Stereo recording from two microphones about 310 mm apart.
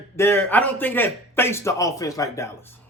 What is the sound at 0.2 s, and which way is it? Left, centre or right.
A man's voice, centre.